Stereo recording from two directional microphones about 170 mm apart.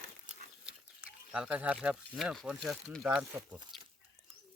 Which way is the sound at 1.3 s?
5° right (ahead or behind).